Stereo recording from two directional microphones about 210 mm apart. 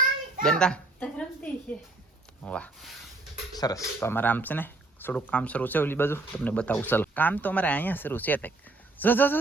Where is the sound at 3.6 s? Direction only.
15° left (ahead or behind).